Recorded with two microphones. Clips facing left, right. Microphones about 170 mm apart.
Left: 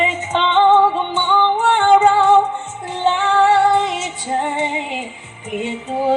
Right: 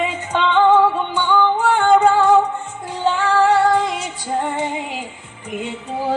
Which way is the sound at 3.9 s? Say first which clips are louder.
Left 1 dB; 5° left (ahead or behind).